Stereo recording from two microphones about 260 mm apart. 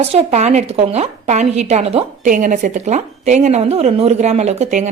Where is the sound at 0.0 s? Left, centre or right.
Right.